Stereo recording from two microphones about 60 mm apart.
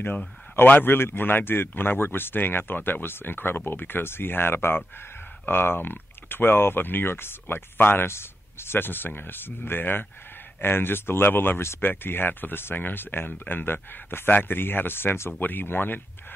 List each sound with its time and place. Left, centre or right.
0.6 s speech: left